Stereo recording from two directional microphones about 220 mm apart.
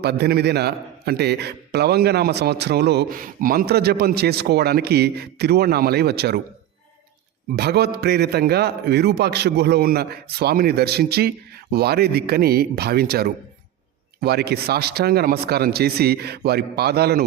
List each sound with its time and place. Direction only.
0.0 s a man's voice: 45° right (ahead or behind)
7.5 s a man's voice: 50° right (ahead or behind)